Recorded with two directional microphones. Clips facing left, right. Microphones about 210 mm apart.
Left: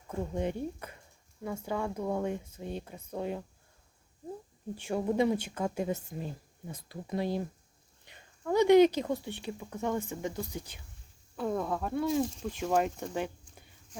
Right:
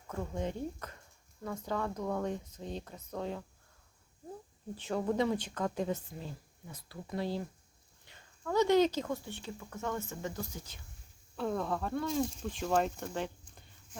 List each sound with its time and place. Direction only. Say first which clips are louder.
0.1 s speech: left 4 dB; 15° left (ahead or behind)
4.8 s speech: left 3 dB; 10° left (ahead or behind)
11.3 s speech: left 2 dB; 5° left (ahead or behind)
13.1 s a sound: left 3 dB; 10° left (ahead or behind)